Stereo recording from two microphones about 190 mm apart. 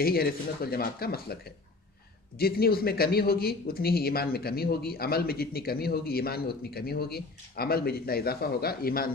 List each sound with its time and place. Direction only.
0.0 s speech: 55° left (ahead or behind)